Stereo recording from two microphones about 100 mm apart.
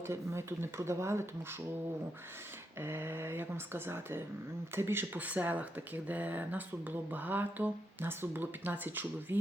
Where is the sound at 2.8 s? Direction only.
25° right (ahead or behind).